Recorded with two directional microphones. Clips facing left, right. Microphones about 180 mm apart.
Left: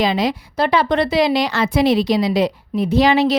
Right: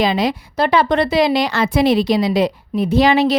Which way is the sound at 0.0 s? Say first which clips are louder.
Right 1 dB; 55° right (ahead or behind).